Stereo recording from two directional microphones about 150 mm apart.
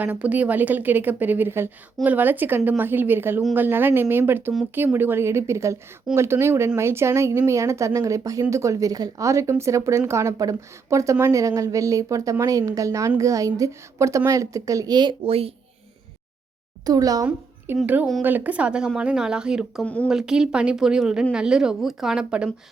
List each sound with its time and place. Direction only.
0.0 s a woman's voice: 10° right (ahead or behind); by 15.5 s 40° right (ahead or behind)
16.8 s a woman's voice: 25° right (ahead or behind)
17.8 s a woman's voice: 10° right (ahead or behind)
19.8 s speech: 10° left (ahead or behind)
20.1 s speech: 5° right (ahead or behind)